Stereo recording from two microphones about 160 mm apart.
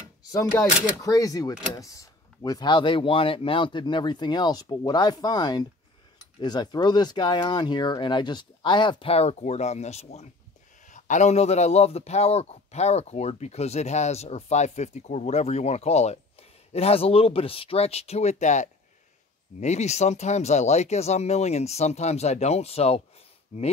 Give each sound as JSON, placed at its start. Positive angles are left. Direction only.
{"t": 0.6, "sound": "speech", "side_deg": -5}
{"t": 1.0, "sound": "a man's voice", "side_deg": 20}